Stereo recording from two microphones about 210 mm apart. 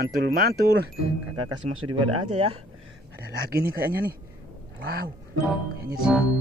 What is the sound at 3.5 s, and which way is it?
Speech, 45° right (ahead or behind).